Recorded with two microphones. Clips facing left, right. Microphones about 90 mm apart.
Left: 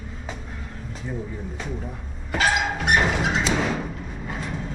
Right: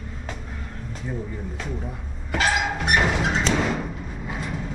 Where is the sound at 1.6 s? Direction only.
Centre (ahead or behind).